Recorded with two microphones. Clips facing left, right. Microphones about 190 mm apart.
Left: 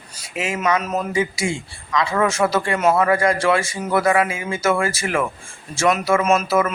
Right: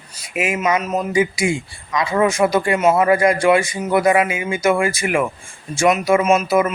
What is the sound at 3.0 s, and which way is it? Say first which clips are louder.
A man's voice: right 3 dB; 20° right (ahead or behind).